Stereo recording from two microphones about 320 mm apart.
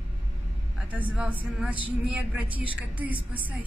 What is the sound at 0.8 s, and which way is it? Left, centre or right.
Speech, centre.